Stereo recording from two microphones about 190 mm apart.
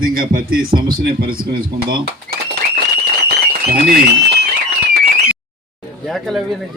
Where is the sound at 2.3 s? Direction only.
50° right (ahead or behind).